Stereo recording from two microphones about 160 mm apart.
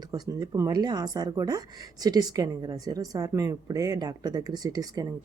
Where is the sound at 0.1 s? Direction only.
20° right (ahead or behind).